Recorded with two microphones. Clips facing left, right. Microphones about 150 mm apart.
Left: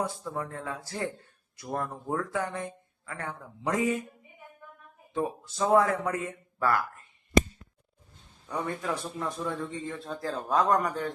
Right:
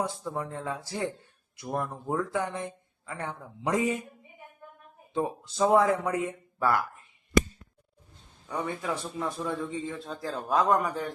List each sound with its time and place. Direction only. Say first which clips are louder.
0.0 s a man's voice: right 1 dB; 15° right (ahead or behind)
5.1 s a man's voice: right 1 dB; 20° right (ahead or behind)
8.4 s a man's voice: even; centre (ahead or behind)